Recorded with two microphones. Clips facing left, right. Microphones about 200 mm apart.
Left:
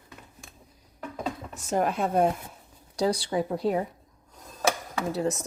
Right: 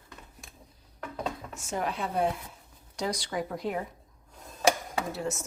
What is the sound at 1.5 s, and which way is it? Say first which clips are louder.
Speech: left 9 dB; 40° left (ahead or behind).